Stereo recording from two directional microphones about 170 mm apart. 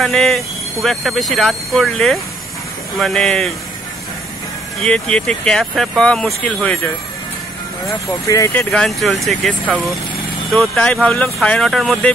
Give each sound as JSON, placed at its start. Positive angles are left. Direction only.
{"t": 0.0, "sound": "speech", "side_deg": 0}
{"t": 4.7, "sound": "speech", "side_deg": 5}
{"t": 8.1, "sound": "speech", "side_deg": 20}
{"t": 8.7, "sound": "speech", "side_deg": 0}